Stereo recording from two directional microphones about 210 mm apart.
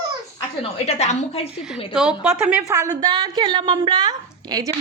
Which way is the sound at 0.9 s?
30° left (ahead or behind).